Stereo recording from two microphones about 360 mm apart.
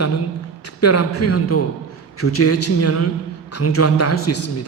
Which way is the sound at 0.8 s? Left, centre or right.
Left.